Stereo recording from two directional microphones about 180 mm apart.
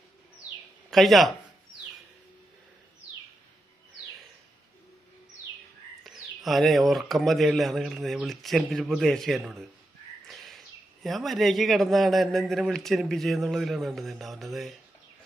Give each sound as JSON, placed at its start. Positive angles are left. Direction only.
{"t": 0.9, "sound": "speech", "side_deg": 0}
{"t": 6.0, "sound": "speech", "side_deg": 0}
{"t": 10.2, "sound": "bird", "side_deg": 0}
{"t": 11.0, "sound": "speech", "side_deg": 0}